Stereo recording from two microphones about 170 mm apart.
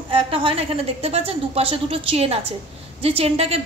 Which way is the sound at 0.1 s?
30° right (ahead or behind).